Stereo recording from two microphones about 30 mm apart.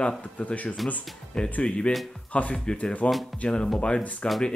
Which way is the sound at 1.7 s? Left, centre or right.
Left.